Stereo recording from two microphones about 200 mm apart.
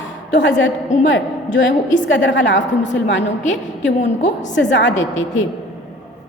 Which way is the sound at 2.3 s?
65° left (ahead or behind).